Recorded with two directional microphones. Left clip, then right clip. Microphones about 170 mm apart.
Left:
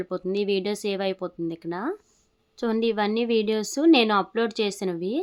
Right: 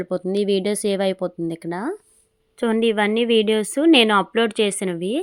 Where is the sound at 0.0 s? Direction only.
25° right (ahead or behind).